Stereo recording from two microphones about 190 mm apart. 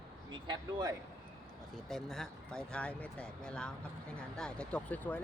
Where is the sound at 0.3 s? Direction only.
25° right (ahead or behind).